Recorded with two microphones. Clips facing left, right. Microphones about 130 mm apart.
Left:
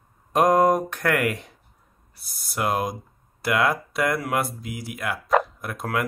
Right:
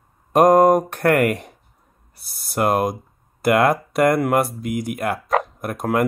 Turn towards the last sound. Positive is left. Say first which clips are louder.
# right 6 dB
turn(degrees=-50)  # may be behind; listen again after turning